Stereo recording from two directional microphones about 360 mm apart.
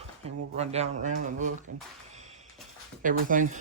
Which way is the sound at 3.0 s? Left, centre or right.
Right.